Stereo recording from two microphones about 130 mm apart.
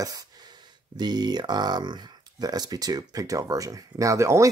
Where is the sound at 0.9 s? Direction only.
35° right (ahead or behind).